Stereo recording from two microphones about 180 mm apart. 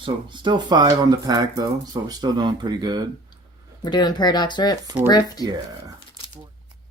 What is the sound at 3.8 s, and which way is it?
Speech, 25° left (ahead or behind).